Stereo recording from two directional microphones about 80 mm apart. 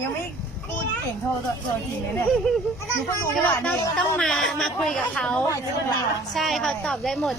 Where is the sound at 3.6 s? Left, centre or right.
Centre.